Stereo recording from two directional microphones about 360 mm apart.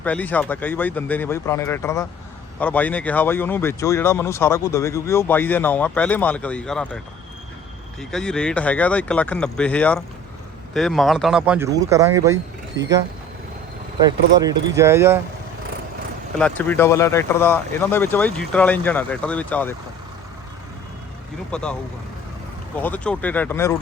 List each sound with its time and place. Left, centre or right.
0.0 s speech: centre
8.1 s speech: centre
12.8 s speech: right
14.3 s speech: centre
16.4 s speech: centre
21.5 s speech: centre
22.8 s speech: centre